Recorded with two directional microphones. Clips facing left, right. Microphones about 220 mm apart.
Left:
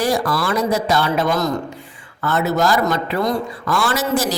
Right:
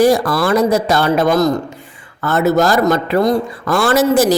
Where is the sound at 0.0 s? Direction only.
45° right (ahead or behind).